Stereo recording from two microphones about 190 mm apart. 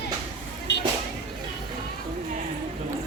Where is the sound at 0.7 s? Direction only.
65° left (ahead or behind).